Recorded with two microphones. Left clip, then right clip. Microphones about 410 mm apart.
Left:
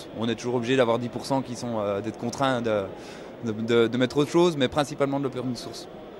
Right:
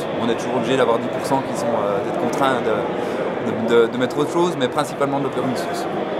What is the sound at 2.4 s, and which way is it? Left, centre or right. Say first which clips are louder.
Speech: right 4 dB; left.